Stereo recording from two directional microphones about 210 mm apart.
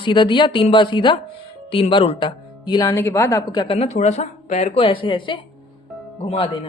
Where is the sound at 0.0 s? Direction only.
20° left (ahead or behind).